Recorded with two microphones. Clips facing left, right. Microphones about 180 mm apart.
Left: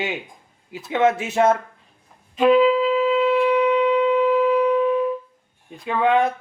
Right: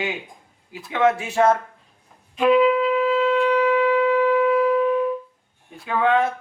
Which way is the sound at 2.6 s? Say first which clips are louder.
Left 1 dB; 30° left (ahead or behind).